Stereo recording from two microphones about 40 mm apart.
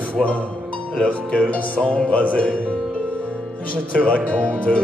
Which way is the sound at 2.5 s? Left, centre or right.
Left.